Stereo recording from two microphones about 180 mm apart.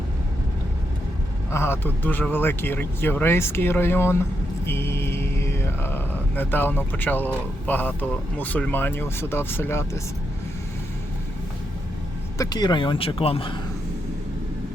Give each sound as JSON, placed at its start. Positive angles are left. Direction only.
{"t": 1.5, "sound": "speech", "side_deg": 15}
{"t": 12.4, "sound": "speech", "side_deg": 25}